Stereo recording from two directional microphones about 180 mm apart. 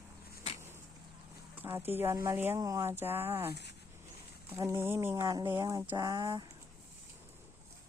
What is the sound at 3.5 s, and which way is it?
Speech, 70° left (ahead or behind).